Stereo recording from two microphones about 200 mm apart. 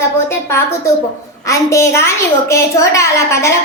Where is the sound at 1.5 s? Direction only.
15° left (ahead or behind).